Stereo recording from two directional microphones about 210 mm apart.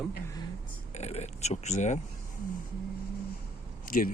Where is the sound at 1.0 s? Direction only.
30° left (ahead or behind).